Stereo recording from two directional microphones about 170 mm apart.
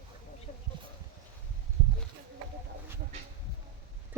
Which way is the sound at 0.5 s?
45° left (ahead or behind).